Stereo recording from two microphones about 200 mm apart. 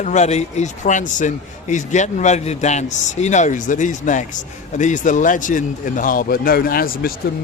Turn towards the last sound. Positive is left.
turn(degrees=45)  # may be behind; listen again after turning